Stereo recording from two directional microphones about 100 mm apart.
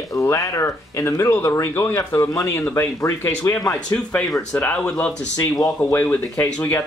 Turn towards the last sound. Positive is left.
turn(degrees=20)  # may be behind; listen again after turning